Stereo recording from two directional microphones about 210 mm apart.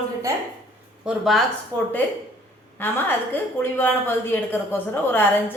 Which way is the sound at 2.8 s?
10° left (ahead or behind).